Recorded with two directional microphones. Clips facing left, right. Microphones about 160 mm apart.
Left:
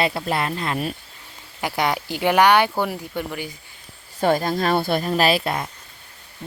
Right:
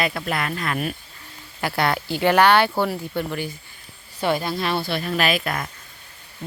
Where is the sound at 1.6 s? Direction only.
15° left (ahead or behind).